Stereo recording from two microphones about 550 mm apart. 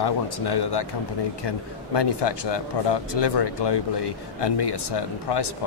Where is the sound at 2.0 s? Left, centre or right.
Left.